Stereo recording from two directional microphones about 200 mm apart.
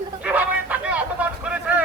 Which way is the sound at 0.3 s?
5° right (ahead or behind).